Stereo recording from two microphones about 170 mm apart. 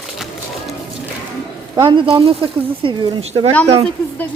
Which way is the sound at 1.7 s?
30° right (ahead or behind).